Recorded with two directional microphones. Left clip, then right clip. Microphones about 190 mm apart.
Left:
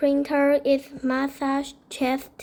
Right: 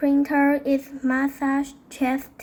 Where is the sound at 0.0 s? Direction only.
35° left (ahead or behind).